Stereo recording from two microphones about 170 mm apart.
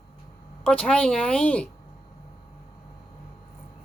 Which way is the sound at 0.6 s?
5° left (ahead or behind).